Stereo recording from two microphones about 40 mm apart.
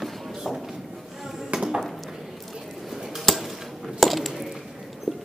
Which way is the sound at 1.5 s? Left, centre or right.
Centre.